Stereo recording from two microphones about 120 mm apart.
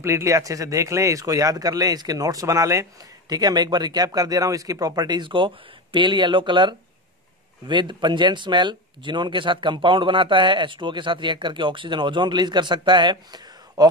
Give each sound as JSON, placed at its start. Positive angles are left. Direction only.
{"t": 0.0, "sound": "speech", "side_deg": -25}